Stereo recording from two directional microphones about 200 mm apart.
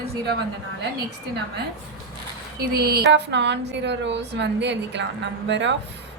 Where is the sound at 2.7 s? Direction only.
50° right (ahead or behind).